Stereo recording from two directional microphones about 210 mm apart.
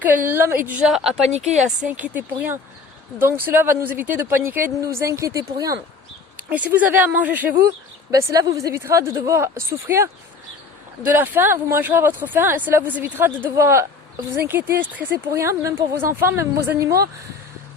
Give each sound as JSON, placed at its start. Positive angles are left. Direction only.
{"t": 0.0, "sound": "speech", "side_deg": -10}
{"t": 11.1, "sound": "speech", "side_deg": -10}